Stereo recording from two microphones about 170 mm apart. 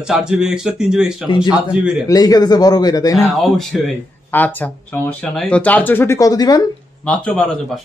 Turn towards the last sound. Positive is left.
turn(degrees=5)  # may be behind; listen again after turning